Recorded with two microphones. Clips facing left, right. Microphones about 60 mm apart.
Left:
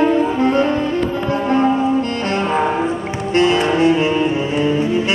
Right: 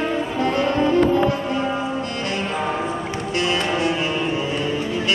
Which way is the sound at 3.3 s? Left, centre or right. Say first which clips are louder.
Left 8 dB; left.